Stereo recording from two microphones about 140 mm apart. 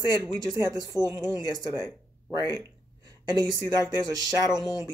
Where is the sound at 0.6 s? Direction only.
30° right (ahead or behind).